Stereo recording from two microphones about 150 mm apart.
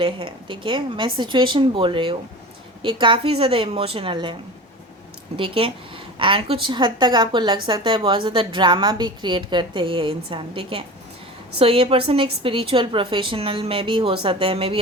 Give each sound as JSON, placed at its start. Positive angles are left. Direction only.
{"t": 0.0, "sound": "a woman's voice", "side_deg": -35}
{"t": 5.4, "sound": "a woman's voice", "side_deg": -35}